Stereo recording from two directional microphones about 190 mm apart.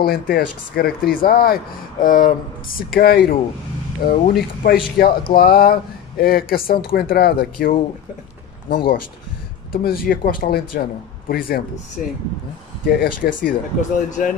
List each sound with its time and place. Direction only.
0.0 s speech: 55° left (ahead or behind)
9.7 s speech: 50° left (ahead or behind)